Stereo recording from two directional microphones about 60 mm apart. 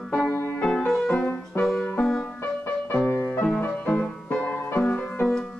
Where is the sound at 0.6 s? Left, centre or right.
Centre.